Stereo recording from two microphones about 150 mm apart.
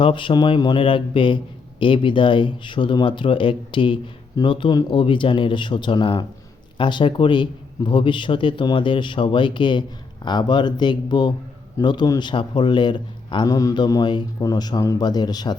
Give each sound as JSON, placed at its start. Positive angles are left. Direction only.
{"t": 0.0, "sound": "a man's voice", "side_deg": 35}